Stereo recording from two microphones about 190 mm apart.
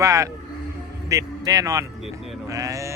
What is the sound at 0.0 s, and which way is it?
A man's voice, 15° right (ahead or behind).